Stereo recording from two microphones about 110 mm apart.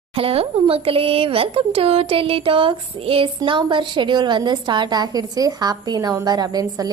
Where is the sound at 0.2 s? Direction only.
60° right (ahead or behind).